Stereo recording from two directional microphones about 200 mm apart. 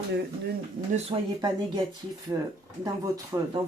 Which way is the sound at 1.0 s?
25° right (ahead or behind).